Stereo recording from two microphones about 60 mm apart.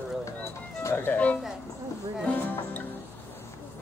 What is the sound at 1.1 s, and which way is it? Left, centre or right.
Speech, left.